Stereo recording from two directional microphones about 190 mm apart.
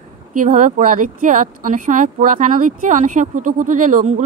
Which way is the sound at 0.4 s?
45° right (ahead or behind).